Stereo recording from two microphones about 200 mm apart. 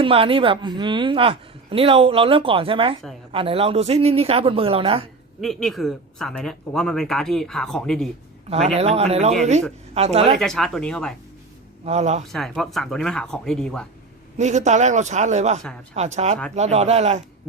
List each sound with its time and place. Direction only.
0.0 s speech: 25° right (ahead or behind)
5.4 s speech: centre (ahead or behind)
8.4 s a man's voice: 30° right (ahead or behind)
10.3 s speech: centre (ahead or behind)
11.9 s a man's voice: 35° right (ahead or behind)
12.3 s speech: centre (ahead or behind)
14.3 s a man's voice: 35° right (ahead or behind)